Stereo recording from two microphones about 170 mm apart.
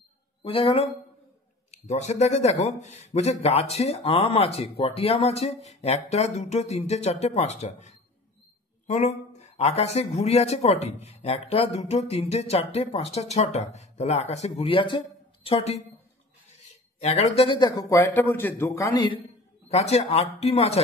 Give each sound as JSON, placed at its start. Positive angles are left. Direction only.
{"t": 0.4, "sound": "speech", "side_deg": 30}
{"t": 17.0, "sound": "a man's voice", "side_deg": 40}
{"t": 19.7, "sound": "speech", "side_deg": 40}